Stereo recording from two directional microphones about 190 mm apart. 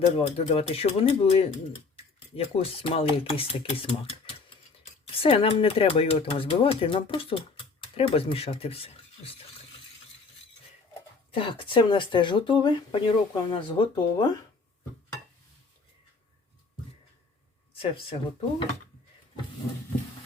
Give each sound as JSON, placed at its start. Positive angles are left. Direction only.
{"t": 0.0, "sound": "speech", "side_deg": 30}
{"t": 5.2, "sound": "speech", "side_deg": 30}
{"t": 11.3, "sound": "speech", "side_deg": 30}
{"t": 17.7, "sound": "speech", "side_deg": 30}